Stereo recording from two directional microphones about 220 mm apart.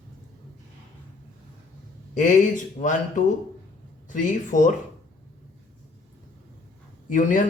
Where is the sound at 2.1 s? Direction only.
35° left (ahead or behind).